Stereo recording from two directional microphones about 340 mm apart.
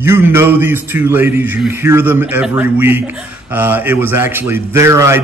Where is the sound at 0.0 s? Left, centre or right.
Centre.